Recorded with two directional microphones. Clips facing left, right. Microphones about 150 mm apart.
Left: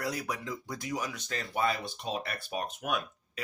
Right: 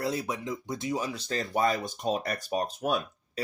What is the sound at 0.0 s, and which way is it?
Speech, 25° right (ahead or behind).